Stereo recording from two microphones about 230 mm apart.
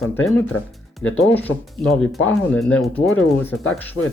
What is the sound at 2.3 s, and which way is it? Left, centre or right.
Speech, centre.